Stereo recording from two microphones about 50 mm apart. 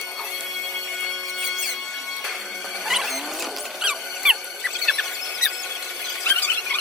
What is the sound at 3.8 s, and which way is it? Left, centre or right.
Music, centre.